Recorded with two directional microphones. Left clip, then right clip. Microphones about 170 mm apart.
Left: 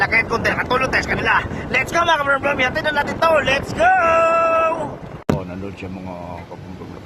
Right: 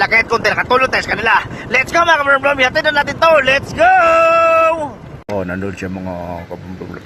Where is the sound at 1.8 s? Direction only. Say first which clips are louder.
Right 5 dB; 20° right (ahead or behind).